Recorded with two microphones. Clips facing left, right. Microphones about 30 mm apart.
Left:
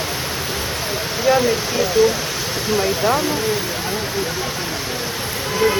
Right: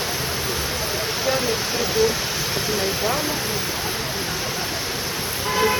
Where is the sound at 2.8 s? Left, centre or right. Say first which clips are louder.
Left 7 dB; left.